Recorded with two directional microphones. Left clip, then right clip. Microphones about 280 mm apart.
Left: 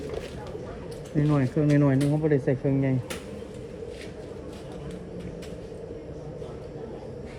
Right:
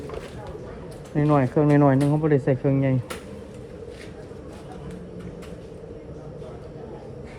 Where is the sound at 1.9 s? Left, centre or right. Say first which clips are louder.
Right 3 dB; right.